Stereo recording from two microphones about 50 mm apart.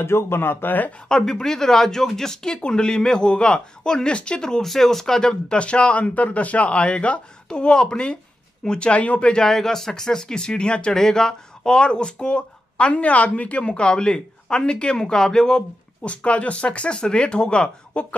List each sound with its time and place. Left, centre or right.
0.0 s speech: left
1.0 s speech: centre
9.4 s speech: centre
16.3 s speech: left